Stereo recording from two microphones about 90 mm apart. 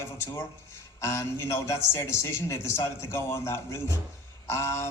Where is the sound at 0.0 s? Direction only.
30° left (ahead or behind).